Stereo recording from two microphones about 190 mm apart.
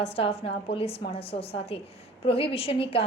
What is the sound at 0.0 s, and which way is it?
A woman's voice, 30° left (ahead or behind).